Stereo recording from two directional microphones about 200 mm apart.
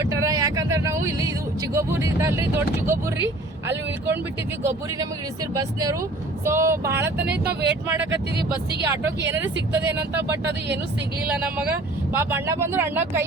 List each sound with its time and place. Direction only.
0.0 s speech: 15° right (ahead or behind)
7.3 s speech: 55° right (ahead or behind)
8.9 s speech: 15° right (ahead or behind)
11.3 s speech: 5° right (ahead or behind)